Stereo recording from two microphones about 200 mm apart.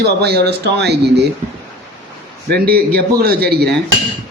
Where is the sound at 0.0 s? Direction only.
55° right (ahead or behind).